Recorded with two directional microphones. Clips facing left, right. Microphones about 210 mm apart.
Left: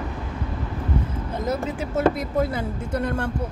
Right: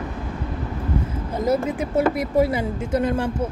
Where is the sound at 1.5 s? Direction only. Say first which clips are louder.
Right 6 dB; 10° right (ahead or behind).